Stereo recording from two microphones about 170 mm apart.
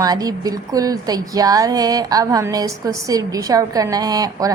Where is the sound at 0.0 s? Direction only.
20° right (ahead or behind).